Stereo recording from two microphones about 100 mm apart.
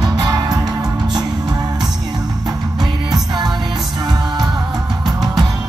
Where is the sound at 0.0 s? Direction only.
45° right (ahead or behind).